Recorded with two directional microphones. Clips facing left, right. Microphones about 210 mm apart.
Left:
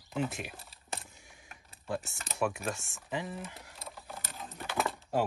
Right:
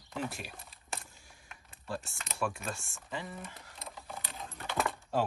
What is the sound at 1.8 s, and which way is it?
Speech, 20° left (ahead or behind).